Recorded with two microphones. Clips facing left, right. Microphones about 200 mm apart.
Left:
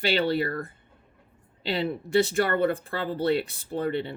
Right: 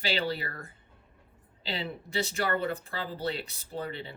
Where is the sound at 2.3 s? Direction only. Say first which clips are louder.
Left 6 dB; 55° left (ahead or behind).